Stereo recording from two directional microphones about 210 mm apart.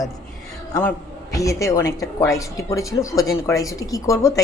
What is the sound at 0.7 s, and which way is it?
A man's voice, 10° left (ahead or behind).